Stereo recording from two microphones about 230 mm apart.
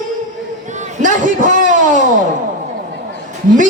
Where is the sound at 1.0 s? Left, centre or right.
Right.